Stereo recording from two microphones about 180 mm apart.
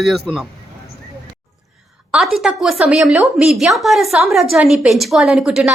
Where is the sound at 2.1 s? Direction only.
Centre (ahead or behind).